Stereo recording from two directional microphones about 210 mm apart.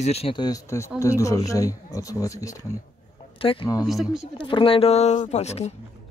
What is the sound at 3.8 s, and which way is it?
Speech, centre (ahead or behind).